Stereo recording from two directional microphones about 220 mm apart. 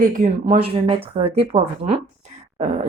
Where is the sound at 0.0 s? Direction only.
40° right (ahead or behind).